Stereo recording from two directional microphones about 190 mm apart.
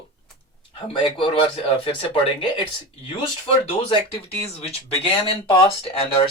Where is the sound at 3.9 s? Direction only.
25° left (ahead or behind).